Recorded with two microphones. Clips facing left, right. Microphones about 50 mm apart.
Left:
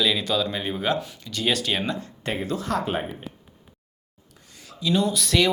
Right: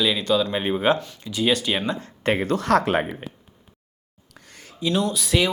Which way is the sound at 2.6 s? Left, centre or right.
Right.